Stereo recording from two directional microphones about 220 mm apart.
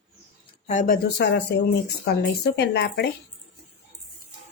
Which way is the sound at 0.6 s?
35° left (ahead or behind).